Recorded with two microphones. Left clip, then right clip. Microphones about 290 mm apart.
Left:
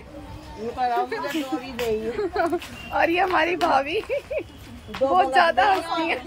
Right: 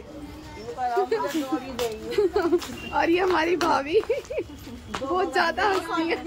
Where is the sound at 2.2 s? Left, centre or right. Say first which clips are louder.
Right 7 dB; centre.